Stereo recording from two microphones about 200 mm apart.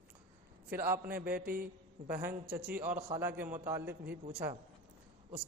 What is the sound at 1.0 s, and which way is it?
Mantra, 45° right (ahead or behind).